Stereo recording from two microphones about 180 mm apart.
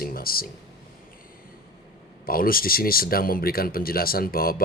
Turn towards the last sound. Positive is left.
turn(degrees=55)  # may be behind; listen again after turning